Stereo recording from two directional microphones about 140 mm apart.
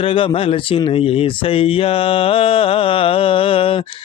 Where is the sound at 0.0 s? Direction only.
40° left (ahead or behind).